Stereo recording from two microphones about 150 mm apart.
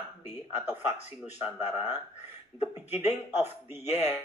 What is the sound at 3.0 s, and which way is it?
Speech, 50° left (ahead or behind).